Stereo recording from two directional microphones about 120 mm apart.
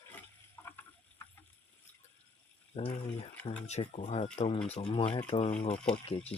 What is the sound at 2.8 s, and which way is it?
Speech, 50° left (ahead or behind).